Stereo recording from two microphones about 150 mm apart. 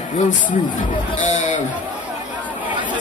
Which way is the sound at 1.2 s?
55° left (ahead or behind).